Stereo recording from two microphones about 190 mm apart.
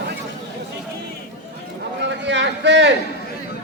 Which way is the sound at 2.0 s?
70° right (ahead or behind).